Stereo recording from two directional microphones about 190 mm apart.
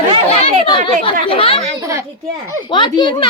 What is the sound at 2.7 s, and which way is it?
Speech, 25° left (ahead or behind).